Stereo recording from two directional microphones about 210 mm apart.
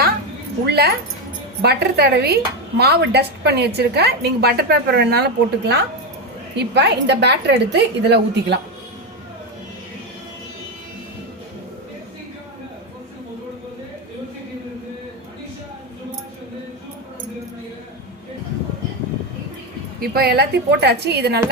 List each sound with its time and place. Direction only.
0.7 s a woman's voice: 50° right (ahead or behind)
20.0 s a woman's voice: 50° right (ahead or behind)